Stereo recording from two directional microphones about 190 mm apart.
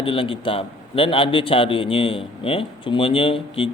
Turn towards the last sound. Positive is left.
turn(degrees=30)  # may be behind; listen again after turning